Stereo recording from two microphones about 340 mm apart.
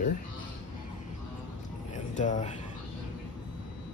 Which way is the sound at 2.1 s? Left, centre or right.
Left.